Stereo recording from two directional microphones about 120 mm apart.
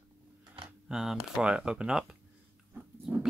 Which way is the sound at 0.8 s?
5° right (ahead or behind).